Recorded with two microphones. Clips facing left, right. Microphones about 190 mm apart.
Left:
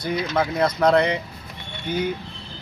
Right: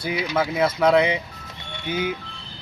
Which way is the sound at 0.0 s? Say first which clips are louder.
Left 1 dB; 5° right (ahead or behind).